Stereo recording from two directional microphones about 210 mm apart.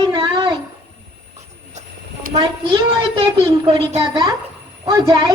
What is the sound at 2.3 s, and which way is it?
A woman's voice, 20° right (ahead or behind).